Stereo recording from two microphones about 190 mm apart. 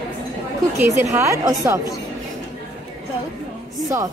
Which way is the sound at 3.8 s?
20° right (ahead or behind).